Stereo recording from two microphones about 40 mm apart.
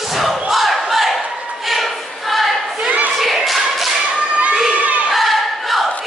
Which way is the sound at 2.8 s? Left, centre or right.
Right.